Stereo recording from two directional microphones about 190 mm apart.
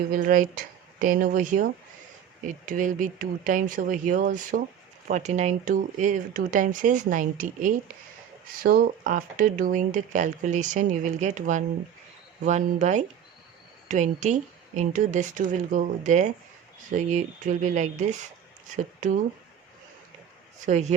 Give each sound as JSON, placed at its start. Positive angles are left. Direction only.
{"t": 0.1, "sound": "speech", "side_deg": -45}
{"t": 20.6, "sound": "speech", "side_deg": -40}